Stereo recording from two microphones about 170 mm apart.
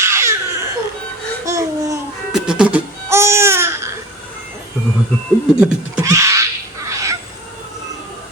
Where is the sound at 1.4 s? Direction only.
20° right (ahead or behind).